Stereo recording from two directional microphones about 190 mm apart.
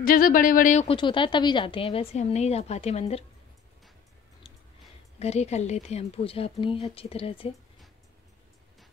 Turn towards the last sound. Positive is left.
turn(degrees=30)  # may be behind; listen again after turning